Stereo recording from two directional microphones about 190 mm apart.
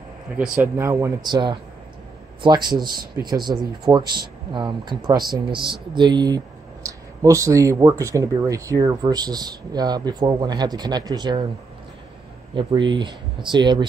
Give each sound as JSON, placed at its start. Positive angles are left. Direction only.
{"t": 0.4, "sound": "speech", "side_deg": -15}
{"t": 12.5, "sound": "speech", "side_deg": -25}